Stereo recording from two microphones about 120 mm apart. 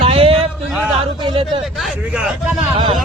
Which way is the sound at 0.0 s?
50° right (ahead or behind).